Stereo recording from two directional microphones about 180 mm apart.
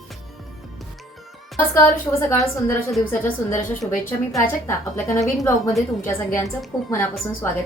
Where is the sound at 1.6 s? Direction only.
15° left (ahead or behind).